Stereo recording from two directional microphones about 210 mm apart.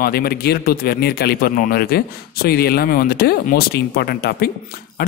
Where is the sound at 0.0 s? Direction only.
45° left (ahead or behind).